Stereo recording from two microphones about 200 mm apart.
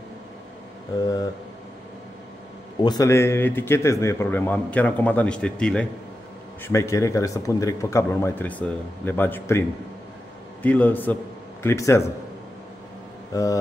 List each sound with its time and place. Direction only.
1.0 s speech: 20° left (ahead or behind)
2.8 s speech: 20° left (ahead or behind)
13.3 s speech: 15° left (ahead or behind)